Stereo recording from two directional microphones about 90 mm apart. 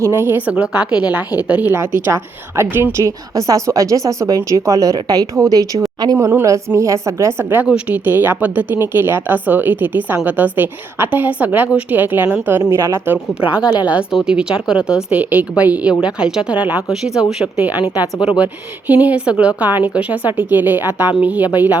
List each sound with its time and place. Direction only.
0.0 s speech: 30° right (ahead or behind)
1.7 s a woman's voice: 30° right (ahead or behind)
3.0 s a woman's voice: 40° right (ahead or behind)
13.7 s a woman's voice: 15° right (ahead or behind)